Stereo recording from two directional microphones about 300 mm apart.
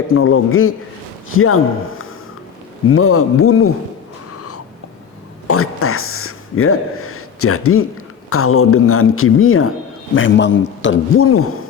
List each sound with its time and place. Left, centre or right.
0.1 s a man's voice: left
4.3 s a sound: left
5.5 s a man's voice: left